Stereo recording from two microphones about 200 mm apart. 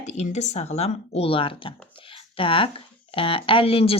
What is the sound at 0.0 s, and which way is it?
Speech, 35° left (ahead or behind).